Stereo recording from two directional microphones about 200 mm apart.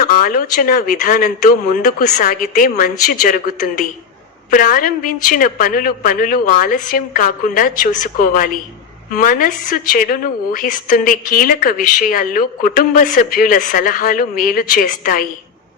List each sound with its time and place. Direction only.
0.0 s a woman's voice: 45° left (ahead or behind)